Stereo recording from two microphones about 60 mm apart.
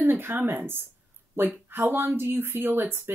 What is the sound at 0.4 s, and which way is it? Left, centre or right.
Speech, right.